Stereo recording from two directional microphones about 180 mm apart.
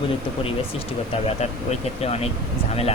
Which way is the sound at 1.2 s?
35° left (ahead or behind).